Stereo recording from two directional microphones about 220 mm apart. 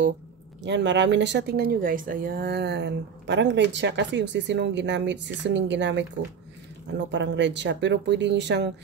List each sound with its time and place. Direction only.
0.6 s speech: 55° right (ahead or behind)